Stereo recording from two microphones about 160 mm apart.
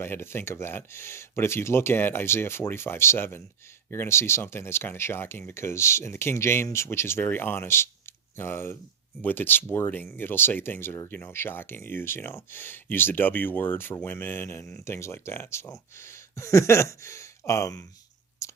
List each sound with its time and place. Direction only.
0.0 s speech: 15° left (ahead or behind)
18.4 s chewing: 20° left (ahead or behind)